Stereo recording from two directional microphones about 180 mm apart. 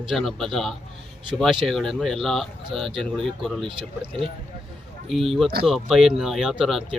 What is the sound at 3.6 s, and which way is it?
Speech, 30° right (ahead or behind).